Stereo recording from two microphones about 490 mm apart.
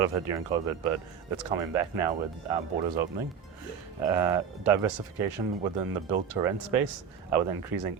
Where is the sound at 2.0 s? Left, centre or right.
Right.